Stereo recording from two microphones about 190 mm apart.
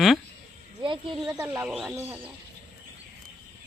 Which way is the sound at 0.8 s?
25° right (ahead or behind).